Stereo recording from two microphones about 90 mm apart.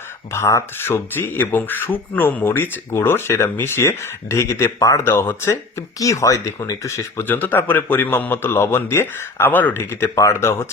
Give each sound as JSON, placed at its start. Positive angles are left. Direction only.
{"t": 0.3, "sound": "speech", "side_deg": 30}
{"t": 5.0, "sound": "speech", "side_deg": 25}
{"t": 7.3, "sound": "speech", "side_deg": 20}